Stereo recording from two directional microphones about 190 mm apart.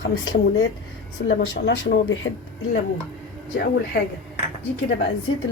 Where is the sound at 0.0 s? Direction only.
80° left.